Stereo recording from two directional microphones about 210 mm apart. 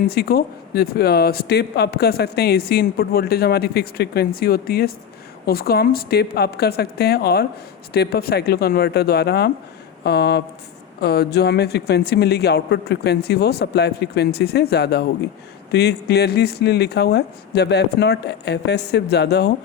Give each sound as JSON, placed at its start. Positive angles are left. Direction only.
{"t": 0.1, "sound": "speech", "side_deg": 50}